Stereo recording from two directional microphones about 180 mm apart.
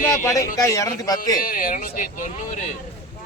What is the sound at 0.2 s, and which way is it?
A man's voice, 15° left (ahead or behind).